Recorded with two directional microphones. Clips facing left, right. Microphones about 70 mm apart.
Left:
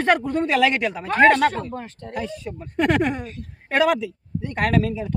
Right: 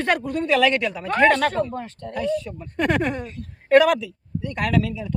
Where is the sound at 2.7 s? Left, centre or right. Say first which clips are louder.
Left 2 dB; centre.